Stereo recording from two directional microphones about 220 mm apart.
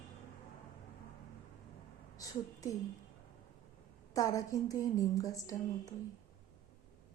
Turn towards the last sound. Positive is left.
turn(degrees=15)  # may be behind; listen again after turning